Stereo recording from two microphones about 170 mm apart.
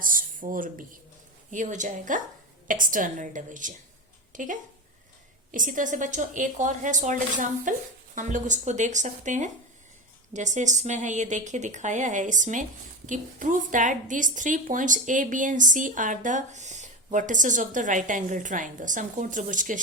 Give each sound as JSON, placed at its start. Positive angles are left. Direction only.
{"t": 0.0, "sound": "a woman's voice", "side_deg": -55}
{"t": 4.3, "sound": "a sound", "side_deg": -50}
{"t": 5.5, "sound": "a woman's voice", "side_deg": -50}